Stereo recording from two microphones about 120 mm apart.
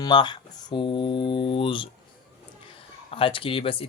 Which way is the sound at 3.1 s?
50° left (ahead or behind).